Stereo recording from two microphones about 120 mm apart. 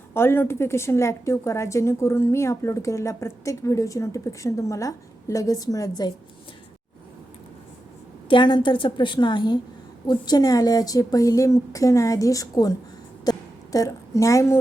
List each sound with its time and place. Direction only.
0.1 s a woman's voice: 20° left (ahead or behind)
8.3 s speech: 40° left (ahead or behind)
13.3 s a sound: 35° left (ahead or behind)
13.7 s a woman's voice: 25° left (ahead or behind)